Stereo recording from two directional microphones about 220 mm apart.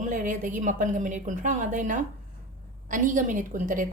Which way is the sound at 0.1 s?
35° right (ahead or behind).